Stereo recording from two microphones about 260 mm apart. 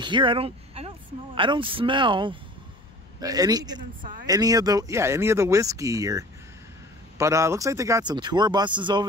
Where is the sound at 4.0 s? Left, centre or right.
Right.